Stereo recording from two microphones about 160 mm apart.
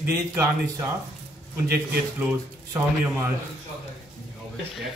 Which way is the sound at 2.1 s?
15° right (ahead or behind).